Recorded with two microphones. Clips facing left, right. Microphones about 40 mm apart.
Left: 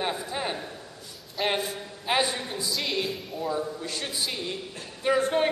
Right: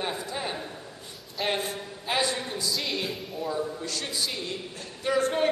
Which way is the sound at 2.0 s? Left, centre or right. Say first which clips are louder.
Left 2 dB; centre.